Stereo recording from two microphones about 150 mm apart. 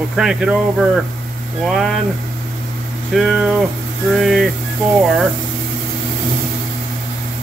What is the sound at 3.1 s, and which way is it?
Speech, centre (ahead or behind).